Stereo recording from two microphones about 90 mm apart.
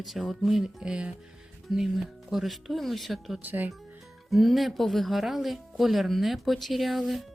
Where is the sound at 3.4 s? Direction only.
20° right (ahead or behind).